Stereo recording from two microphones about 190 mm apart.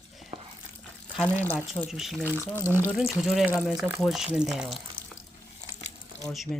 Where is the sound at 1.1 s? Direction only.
5° left (ahead or behind).